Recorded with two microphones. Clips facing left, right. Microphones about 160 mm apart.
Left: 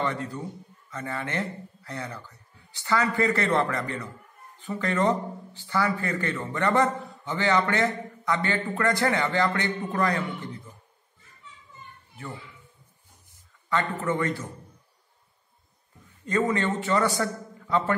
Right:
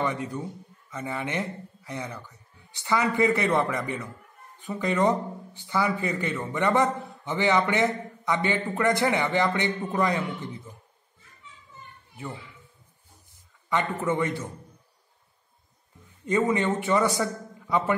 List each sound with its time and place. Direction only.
0.0 s a man's voice: 15° right (ahead or behind)
13.7 s a man's voice: 15° right (ahead or behind)
16.3 s a man's voice: 20° right (ahead or behind)